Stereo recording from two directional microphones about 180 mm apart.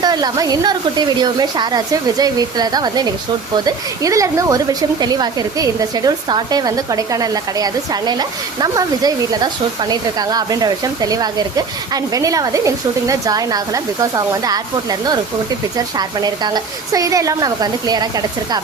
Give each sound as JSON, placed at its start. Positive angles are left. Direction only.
{"t": 0.0, "sound": "speech", "side_deg": -20}